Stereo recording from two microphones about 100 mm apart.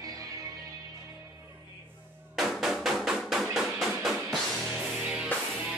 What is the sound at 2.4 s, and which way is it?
Music, centre (ahead or behind).